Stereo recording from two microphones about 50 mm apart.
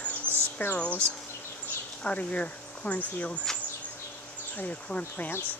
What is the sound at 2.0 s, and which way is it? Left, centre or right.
Speech, left.